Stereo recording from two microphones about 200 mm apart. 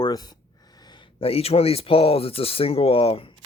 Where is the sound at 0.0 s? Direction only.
20° left (ahead or behind).